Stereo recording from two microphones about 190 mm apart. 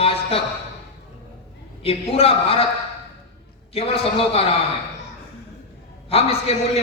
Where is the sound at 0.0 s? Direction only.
30° left (ahead or behind).